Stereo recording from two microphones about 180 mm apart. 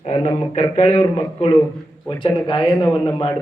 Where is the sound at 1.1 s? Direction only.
35° left (ahead or behind).